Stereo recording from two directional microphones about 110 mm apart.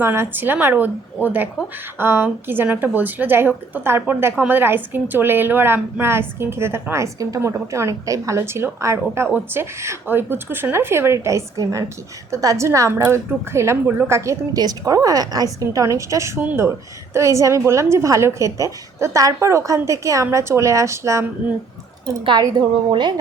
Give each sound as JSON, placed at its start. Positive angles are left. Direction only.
{"t": 0.0, "sound": "a woman's voice", "side_deg": -20}
{"t": 22.2, "sound": "a woman's voice", "side_deg": -40}